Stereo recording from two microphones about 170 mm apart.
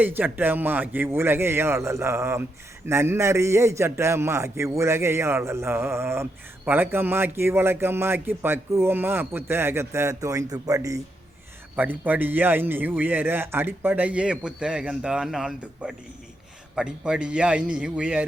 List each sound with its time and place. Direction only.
0.0 s a man's voice: 10° right (ahead or behind)